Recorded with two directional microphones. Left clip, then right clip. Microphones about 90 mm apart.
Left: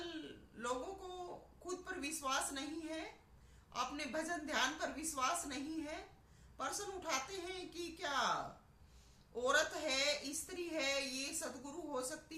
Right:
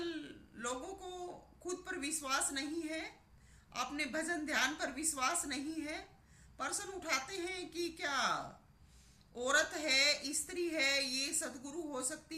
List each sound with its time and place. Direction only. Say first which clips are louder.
0.0 s a sound: right 5 dB; 40° left (ahead or behind)
1.6 s a woman's voice: right 3 dB; 35° left (ahead or behind)
9.3 s a woman's voice: right 2 dB; 35° left (ahead or behind)